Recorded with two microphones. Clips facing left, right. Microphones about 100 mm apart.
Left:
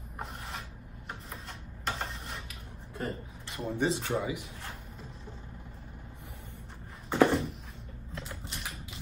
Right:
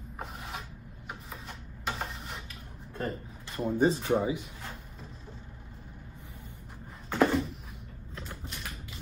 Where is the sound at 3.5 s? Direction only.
35° right (ahead or behind).